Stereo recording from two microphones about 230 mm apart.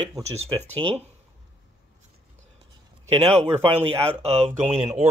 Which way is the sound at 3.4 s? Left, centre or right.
Right.